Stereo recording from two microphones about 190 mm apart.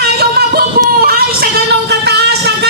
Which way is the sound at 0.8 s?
50° right (ahead or behind).